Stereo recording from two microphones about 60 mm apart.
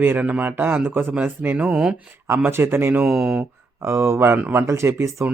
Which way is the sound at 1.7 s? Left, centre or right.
Centre.